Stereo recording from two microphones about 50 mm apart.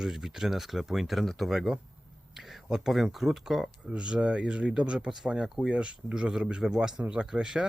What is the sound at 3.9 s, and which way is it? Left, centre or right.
Speech, right.